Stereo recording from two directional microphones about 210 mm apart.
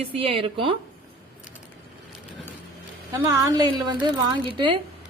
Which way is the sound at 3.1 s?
15° right (ahead or behind).